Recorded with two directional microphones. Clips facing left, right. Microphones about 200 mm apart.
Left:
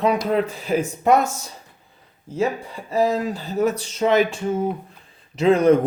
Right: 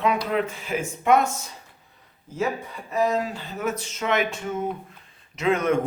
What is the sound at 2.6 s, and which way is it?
A man's voice, 30° left (ahead or behind).